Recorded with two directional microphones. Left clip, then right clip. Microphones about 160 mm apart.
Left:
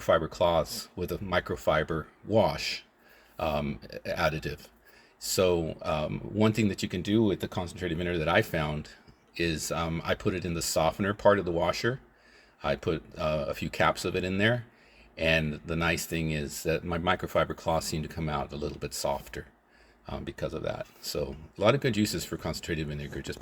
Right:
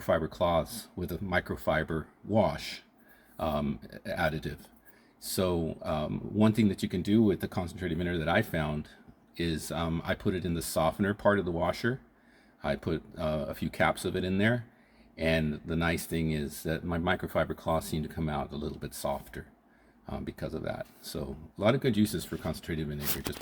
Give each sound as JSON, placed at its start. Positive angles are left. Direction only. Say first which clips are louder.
{"t": 0.0, "sound": "speech", "louder": "left 3 dB", "side_deg": 20}